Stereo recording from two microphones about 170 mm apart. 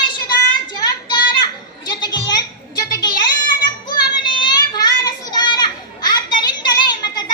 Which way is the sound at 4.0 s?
25° left (ahead or behind).